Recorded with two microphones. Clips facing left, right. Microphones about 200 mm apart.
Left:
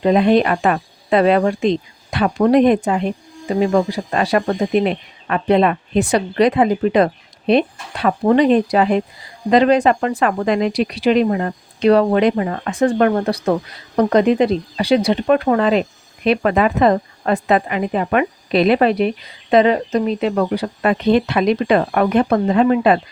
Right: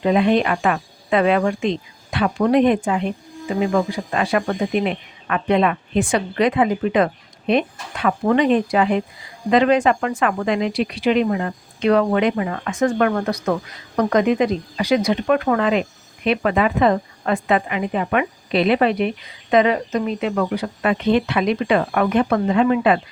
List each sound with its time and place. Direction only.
0.0 s a woman's voice: 40° left (ahead or behind)